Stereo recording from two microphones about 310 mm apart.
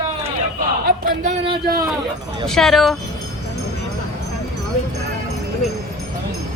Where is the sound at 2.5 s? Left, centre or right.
Centre.